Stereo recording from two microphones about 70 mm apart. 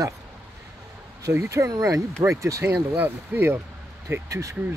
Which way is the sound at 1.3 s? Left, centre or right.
Right.